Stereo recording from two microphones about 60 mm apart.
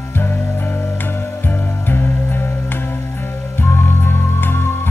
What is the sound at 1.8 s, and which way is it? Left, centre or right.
Music, left.